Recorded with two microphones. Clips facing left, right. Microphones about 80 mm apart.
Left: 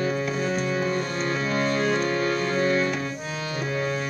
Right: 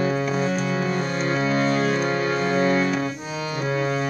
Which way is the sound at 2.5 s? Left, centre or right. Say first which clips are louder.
Right 3 dB; right.